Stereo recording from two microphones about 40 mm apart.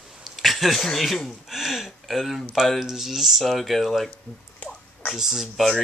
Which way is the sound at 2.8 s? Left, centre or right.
Centre.